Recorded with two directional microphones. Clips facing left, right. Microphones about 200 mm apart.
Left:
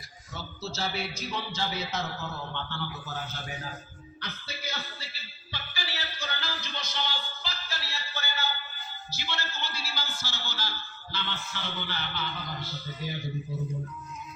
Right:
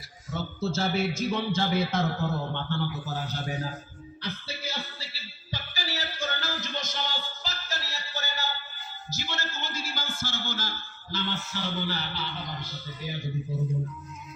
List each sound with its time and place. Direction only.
0.3 s speech: 50° right (ahead or behind)
4.2 s music: 30° right (ahead or behind)
9.0 s speech: 45° right (ahead or behind)